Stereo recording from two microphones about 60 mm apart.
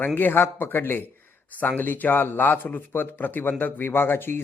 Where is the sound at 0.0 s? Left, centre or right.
Left.